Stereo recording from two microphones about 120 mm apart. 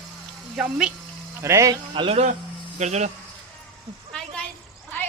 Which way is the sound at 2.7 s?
70° right (ahead or behind).